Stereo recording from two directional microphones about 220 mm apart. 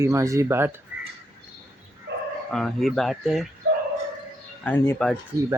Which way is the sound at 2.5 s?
Centre (ahead or behind).